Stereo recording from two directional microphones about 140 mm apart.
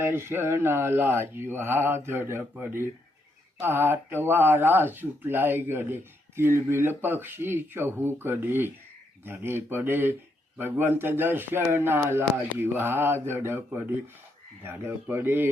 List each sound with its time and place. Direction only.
0.0 s speech: 15° right (ahead or behind)